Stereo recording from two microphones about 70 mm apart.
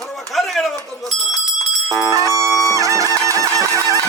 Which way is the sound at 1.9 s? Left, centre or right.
Right.